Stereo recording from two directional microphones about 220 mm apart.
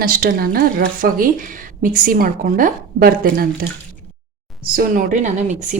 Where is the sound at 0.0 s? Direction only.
40° right (ahead or behind).